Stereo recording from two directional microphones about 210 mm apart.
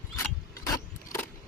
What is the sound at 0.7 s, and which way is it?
Keys jangling, 10° left (ahead or behind).